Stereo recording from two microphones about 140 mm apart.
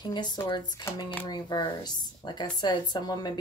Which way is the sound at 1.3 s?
30° left (ahead or behind).